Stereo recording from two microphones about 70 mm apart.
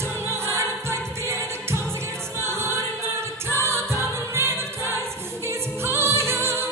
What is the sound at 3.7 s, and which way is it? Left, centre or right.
Music, right.